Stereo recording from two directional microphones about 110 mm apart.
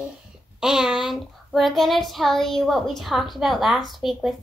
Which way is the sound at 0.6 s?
5° right (ahead or behind).